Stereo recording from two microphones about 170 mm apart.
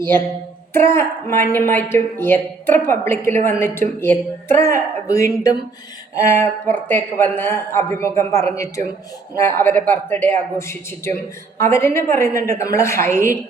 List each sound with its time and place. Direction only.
0.7 s a woman's voice: 15° left (ahead or behind)